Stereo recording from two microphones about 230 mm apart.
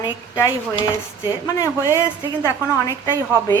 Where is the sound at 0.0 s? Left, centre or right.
Centre.